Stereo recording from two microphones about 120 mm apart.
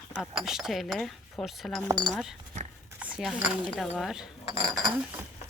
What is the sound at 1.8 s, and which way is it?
Speech, 30° right (ahead or behind).